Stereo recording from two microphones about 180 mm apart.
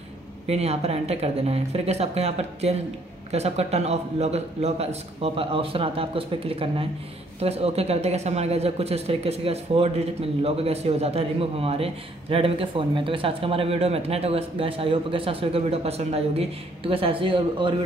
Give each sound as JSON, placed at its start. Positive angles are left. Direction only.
{"t": 0.5, "sound": "speech", "side_deg": -35}